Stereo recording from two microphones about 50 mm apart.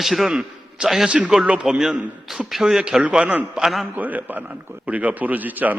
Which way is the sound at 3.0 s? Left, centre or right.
Right.